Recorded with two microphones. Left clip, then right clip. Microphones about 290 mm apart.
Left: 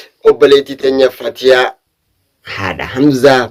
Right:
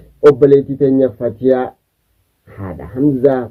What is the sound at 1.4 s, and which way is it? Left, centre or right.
Speech, centre.